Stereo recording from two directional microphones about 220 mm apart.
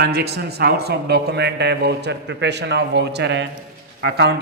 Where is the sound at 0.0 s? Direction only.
50° right (ahead or behind).